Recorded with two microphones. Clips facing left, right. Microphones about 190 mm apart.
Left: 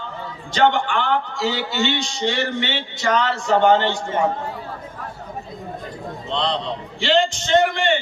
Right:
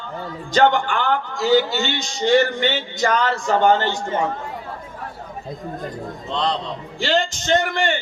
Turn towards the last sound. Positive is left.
turn(degrees=-45)  # may be behind; listen again after turning